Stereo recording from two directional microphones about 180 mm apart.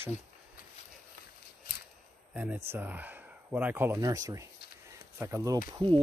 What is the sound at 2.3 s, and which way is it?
Speech, 5° right (ahead or behind).